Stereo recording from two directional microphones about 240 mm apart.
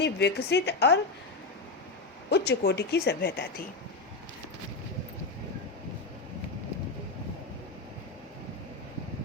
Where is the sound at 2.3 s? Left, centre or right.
Left.